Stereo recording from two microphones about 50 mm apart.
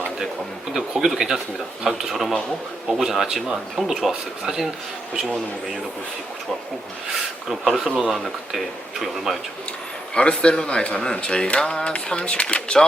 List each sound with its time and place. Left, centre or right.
0.7 s speech: centre
7.1 s speech: centre
10.2 s speech: left